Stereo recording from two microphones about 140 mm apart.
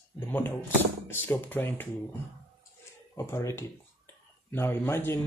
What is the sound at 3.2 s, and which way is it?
Speech, 20° left (ahead or behind).